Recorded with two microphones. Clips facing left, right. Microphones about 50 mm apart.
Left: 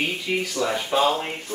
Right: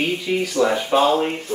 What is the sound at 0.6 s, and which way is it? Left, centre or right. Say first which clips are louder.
Speech: right 6 dB; right.